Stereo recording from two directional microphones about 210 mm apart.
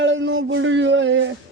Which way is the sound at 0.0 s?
60° right (ahead or behind).